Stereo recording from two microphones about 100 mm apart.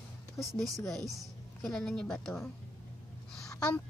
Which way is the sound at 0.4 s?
Centre (ahead or behind).